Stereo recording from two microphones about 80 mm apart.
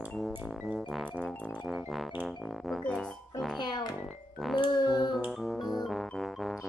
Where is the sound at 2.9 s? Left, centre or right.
Centre.